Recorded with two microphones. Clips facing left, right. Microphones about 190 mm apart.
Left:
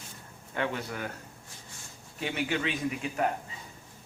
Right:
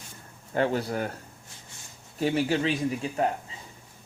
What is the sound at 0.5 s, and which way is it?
Speech, 35° right (ahead or behind).